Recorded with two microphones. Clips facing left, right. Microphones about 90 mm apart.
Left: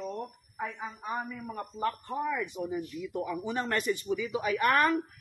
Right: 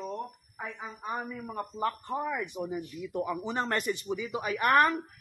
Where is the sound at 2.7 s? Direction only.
20° right (ahead or behind).